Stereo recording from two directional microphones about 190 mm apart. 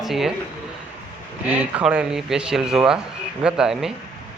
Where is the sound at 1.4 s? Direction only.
10° right (ahead or behind).